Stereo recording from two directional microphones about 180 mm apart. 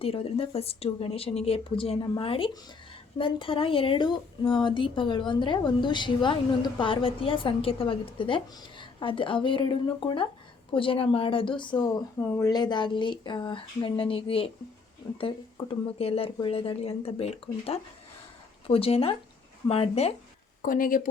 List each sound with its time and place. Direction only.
0.0 s speech: 30° left (ahead or behind)
20.6 s speech: 50° left (ahead or behind)